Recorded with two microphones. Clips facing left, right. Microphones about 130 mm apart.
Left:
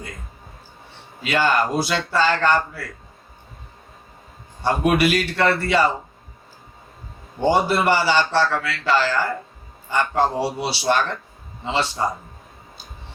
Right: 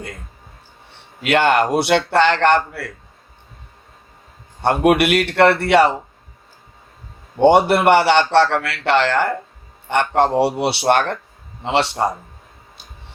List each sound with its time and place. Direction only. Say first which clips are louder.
1.2 s speech: right 4 dB; 65° right (ahead or behind)
4.6 s a man's voice: right 4 dB; 60° right (ahead or behind)
7.3 s a man's voice: right 6 dB; 65° right (ahead or behind)